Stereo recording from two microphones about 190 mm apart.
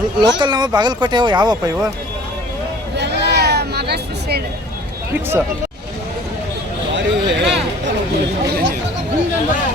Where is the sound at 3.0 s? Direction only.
60° right (ahead or behind).